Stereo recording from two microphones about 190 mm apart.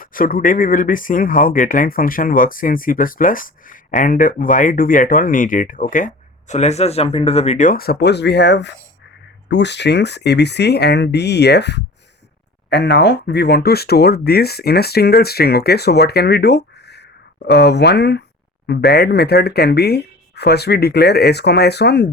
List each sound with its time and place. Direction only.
0.0 s speech: 50° left (ahead or behind)